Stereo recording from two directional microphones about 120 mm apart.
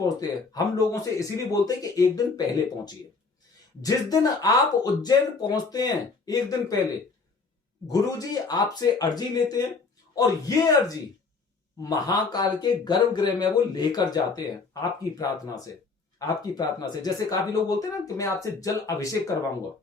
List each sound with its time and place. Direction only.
0.0 s speech: 30° left (ahead or behind)
7.9 s speech: 30° left (ahead or behind)